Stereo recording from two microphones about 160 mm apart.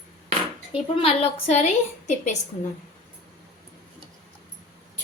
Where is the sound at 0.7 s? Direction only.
35° left (ahead or behind).